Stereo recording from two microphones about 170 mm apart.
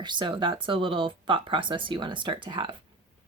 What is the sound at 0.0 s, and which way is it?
Speech, 25° right (ahead or behind).